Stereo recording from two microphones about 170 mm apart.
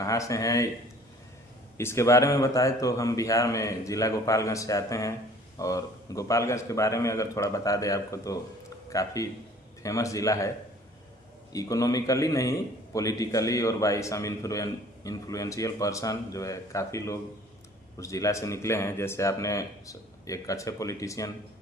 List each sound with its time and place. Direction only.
0.0 s a man's voice: 20° left (ahead or behind)
1.8 s a man's voice: 15° left (ahead or behind)
11.5 s a man's voice: 20° left (ahead or behind)